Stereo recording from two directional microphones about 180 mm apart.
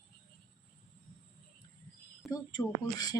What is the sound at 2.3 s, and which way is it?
Speech, 20° left (ahead or behind).